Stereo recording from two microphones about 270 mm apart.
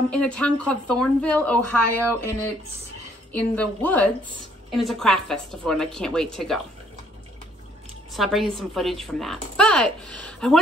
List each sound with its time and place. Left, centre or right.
0.1 s a woman's voice: centre
3.3 s a woman's voice: centre
8.1 s a woman's voice: centre